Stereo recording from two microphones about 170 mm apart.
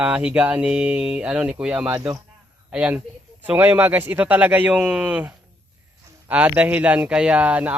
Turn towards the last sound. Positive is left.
turn(degrees=-10)  # may be behind; listen again after turning